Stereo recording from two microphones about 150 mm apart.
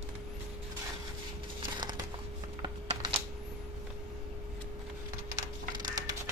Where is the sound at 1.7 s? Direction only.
30° right (ahead or behind).